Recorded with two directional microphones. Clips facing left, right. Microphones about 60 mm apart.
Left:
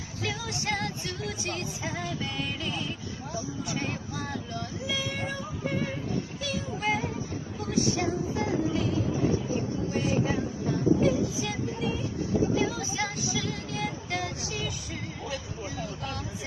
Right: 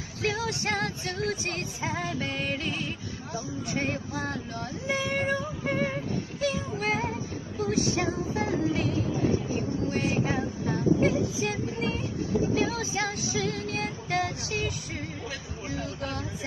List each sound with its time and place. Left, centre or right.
0.2 s music: right
2.0 s speech: right
6.4 s music: right
7.7 s music: right
9.9 s music: right
12.5 s music: right